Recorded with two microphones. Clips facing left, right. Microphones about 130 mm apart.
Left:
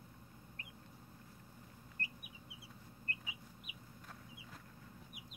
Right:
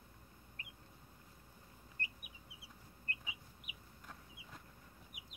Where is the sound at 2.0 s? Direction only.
40° left (ahead or behind).